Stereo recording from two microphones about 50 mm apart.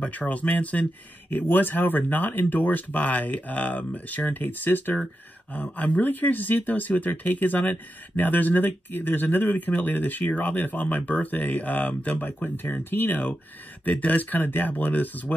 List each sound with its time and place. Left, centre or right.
0.0 s speech: left
1.3 s speech: left